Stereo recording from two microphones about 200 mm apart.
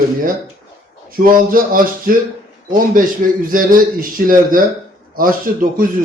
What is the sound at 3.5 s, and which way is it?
Speech, 45° right (ahead or behind).